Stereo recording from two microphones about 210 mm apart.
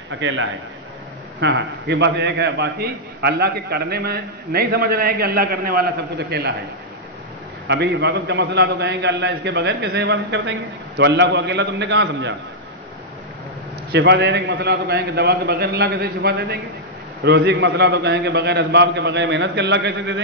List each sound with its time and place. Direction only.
0.2 s a man's voice: 65° right (ahead or behind)
7.6 s a man's voice: 55° right (ahead or behind)
13.9 s a man's voice: 55° right (ahead or behind)